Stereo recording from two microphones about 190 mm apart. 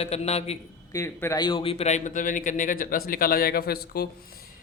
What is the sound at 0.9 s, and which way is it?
A man's voice, 15° left (ahead or behind).